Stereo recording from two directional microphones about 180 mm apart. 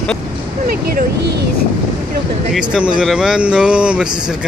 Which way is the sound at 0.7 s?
55° right (ahead or behind).